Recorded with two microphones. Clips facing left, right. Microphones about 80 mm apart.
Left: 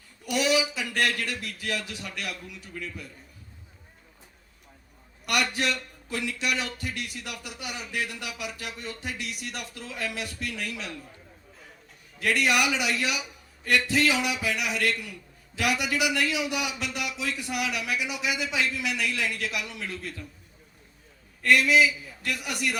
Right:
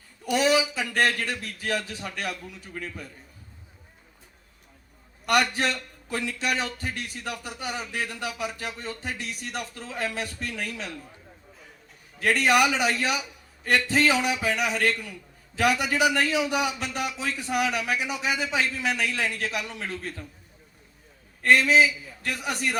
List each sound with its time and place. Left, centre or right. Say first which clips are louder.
0.3 s a man's voice: right 3 dB; right
5.2 s a man's voice: right 4 dB; right
12.2 s a man's voice: right 3 dB; right
21.4 s a man's voice: right 2 dB; right